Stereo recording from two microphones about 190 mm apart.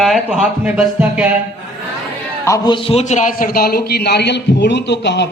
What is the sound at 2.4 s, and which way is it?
A man's voice, 20° left (ahead or behind).